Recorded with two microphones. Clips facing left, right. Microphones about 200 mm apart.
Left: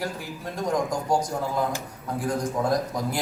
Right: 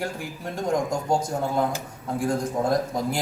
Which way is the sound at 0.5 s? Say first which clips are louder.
Right 1 dB; 25° right (ahead or behind).